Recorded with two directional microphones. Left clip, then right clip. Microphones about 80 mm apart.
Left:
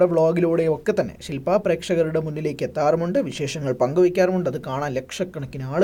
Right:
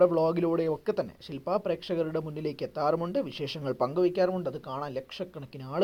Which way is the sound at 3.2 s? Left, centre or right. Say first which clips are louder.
Left 7 dB; right.